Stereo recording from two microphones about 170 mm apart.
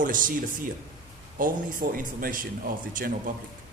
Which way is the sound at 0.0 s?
50° right (ahead or behind).